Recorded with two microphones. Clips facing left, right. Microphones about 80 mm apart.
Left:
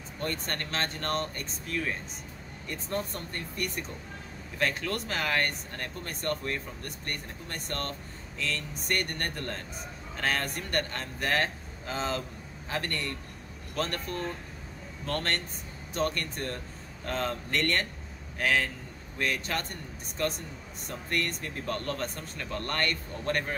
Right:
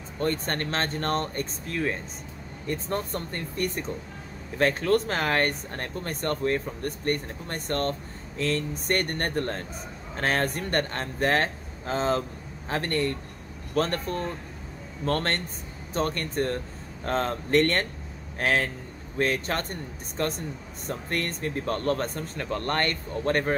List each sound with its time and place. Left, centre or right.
0.2 s speech: right